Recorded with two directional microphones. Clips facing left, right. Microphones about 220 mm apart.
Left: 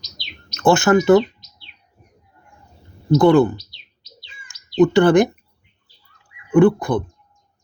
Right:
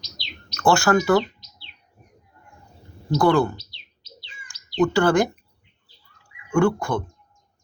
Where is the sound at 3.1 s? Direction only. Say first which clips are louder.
Left 6 dB; 20° left (ahead or behind).